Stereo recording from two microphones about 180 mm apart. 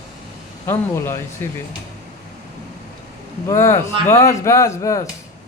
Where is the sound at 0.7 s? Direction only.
15° left (ahead or behind).